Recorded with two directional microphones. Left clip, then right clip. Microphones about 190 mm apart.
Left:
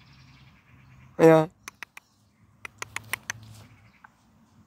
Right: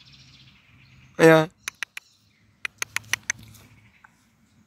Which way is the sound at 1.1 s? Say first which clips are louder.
Right 2 dB; centre (ahead or behind).